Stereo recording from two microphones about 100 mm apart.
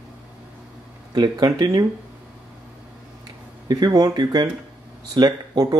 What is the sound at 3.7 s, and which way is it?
Speech, 45° right (ahead or behind).